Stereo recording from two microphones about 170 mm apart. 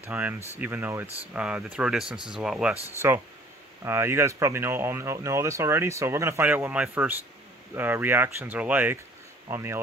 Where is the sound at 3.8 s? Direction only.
15° right (ahead or behind).